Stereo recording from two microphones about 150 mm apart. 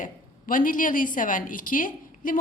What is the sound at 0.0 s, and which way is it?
A woman's voice, 65° left (ahead or behind).